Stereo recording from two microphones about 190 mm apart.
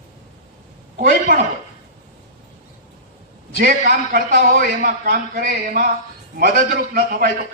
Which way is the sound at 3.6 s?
50° right (ahead or behind).